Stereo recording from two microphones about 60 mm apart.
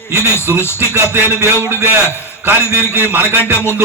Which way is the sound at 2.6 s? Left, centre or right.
Left.